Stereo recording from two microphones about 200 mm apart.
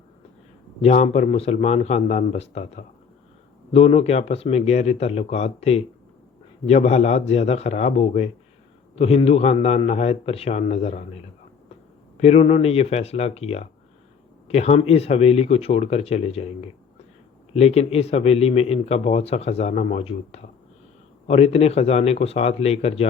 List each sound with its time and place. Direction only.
0.8 s a man's voice: 35° left (ahead or behind)
12.1 s a man's voice: 30° left (ahead or behind)